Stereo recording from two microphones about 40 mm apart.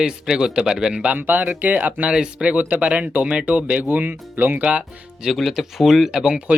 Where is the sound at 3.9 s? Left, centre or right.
Right.